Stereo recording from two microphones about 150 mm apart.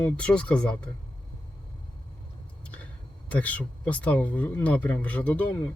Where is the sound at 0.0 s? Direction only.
5° left (ahead or behind).